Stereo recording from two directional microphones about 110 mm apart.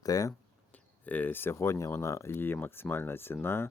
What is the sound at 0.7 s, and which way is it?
Speech, 15° left (ahead or behind).